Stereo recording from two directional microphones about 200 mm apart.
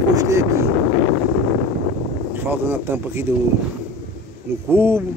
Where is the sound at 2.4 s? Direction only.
10° right (ahead or behind).